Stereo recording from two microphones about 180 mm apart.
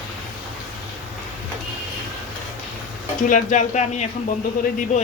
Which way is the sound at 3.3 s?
45° left (ahead or behind).